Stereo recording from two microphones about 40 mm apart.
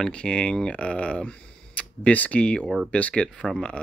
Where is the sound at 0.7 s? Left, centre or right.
Left.